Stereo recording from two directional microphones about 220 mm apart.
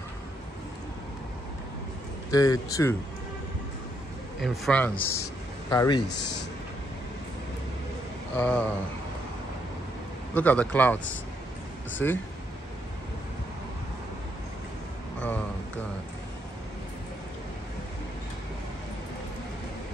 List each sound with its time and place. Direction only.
2.3 s a man's voice: 15° left (ahead or behind)
4.4 s a man's voice: 5° left (ahead or behind)
8.4 s a man's voice: 5° left (ahead or behind)
10.3 s a man's voice: 5° left (ahead or behind)
12.0 s a man's voice: 10° left (ahead or behind)
15.1 s a sound: 10° left (ahead or behind)